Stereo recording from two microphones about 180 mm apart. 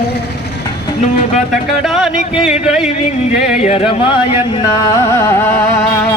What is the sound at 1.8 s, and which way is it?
A man's voice, centre (ahead or behind).